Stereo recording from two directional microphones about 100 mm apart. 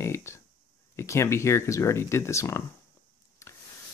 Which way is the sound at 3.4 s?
30° left (ahead or behind).